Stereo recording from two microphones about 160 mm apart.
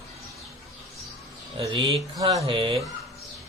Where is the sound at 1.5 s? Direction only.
35° right (ahead or behind).